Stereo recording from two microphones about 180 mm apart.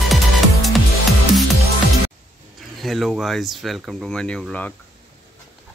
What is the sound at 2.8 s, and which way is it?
Speech, centre (ahead or behind).